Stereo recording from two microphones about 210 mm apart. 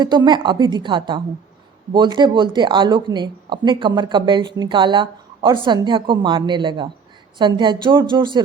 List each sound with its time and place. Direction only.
0.0 s speech: 20° right (ahead or behind)